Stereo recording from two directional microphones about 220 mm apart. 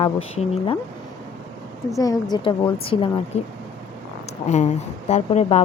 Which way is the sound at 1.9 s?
15° left (ahead or behind).